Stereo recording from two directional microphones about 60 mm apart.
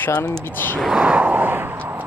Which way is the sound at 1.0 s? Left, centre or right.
Right.